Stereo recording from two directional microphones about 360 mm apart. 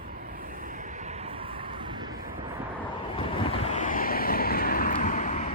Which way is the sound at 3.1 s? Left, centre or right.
Centre.